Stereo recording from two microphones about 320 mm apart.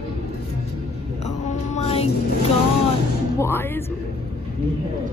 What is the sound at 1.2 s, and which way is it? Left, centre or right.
Music, left.